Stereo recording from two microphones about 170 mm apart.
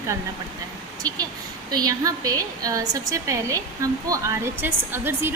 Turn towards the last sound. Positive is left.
turn(degrees=-15)  # may be behind; listen again after turning